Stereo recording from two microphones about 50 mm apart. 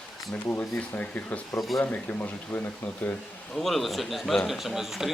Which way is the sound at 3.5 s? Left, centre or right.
Centre.